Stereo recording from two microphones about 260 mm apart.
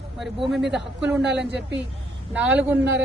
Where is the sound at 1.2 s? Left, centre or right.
Right.